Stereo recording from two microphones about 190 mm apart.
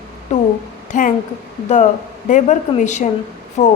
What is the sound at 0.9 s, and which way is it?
Speech, 40° left (ahead or behind).